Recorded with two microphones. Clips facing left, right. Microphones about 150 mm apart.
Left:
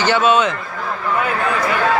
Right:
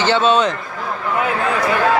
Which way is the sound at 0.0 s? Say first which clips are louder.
Even; 25° right (ahead or behind).